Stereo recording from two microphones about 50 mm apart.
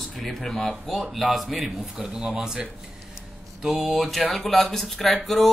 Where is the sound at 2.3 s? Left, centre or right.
Right.